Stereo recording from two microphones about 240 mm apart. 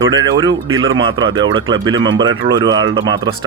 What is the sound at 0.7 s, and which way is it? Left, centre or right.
Speech, right.